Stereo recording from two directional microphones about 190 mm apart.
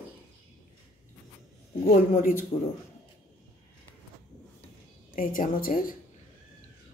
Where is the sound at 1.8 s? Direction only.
45° left (ahead or behind).